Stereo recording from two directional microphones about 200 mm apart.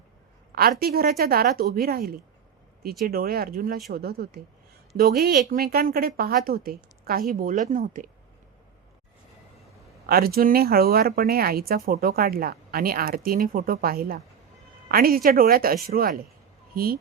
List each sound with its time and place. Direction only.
0.8 s speech: 50° right (ahead or behind)
10.1 s speech: 50° right (ahead or behind)